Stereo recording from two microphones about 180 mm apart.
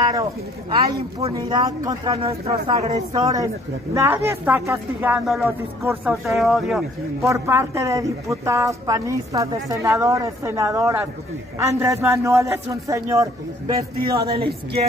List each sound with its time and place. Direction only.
0.1 s speech: 25° right (ahead or behind)
2.2 s a man's voice: 35° right (ahead or behind)
3.1 s a woman's voice: 20° right (ahead or behind); by 6.8 s centre (ahead or behind)
7.2 s a woman's voice: 15° right (ahead or behind)